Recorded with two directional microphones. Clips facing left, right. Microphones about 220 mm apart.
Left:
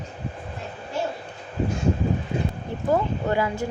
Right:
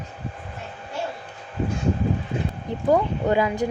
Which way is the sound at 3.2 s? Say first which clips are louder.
Right 4 dB; 20° right (ahead or behind).